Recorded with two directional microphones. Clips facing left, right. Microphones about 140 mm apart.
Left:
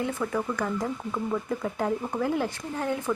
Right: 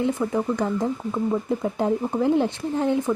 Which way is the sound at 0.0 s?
20° right (ahead or behind).